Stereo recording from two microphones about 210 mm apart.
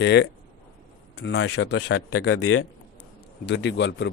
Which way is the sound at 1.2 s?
70° left (ahead or behind).